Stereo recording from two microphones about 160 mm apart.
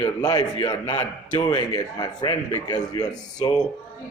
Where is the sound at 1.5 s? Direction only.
25° left (ahead or behind).